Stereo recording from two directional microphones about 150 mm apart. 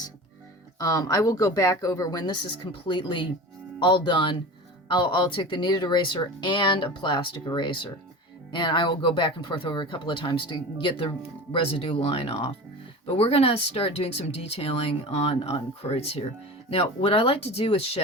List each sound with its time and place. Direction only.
0.8 s speech: 25° left (ahead or behind); by 18.0 s 45° left (ahead or behind)